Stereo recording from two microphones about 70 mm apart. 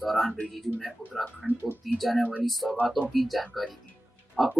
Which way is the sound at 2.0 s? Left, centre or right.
Centre.